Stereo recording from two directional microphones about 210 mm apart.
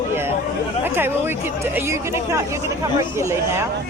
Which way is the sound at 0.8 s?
10° right (ahead or behind).